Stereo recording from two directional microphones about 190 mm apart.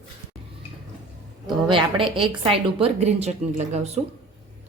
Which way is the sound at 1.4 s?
25° right (ahead or behind).